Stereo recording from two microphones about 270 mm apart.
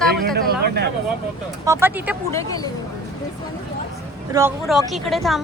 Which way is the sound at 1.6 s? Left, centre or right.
Centre.